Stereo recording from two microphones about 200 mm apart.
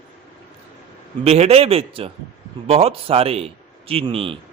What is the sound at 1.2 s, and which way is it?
A man's voice, 30° right (ahead or behind).